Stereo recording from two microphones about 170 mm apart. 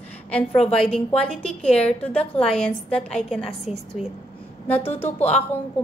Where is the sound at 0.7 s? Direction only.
35° left (ahead or behind).